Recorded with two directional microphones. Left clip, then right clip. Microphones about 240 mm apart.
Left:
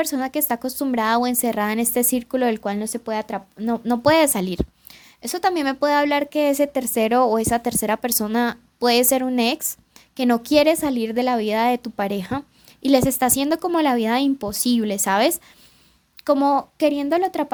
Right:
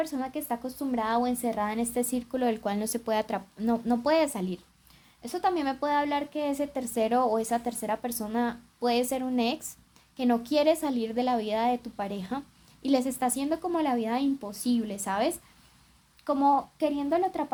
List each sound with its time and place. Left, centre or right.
0.0 s a woman's voice: left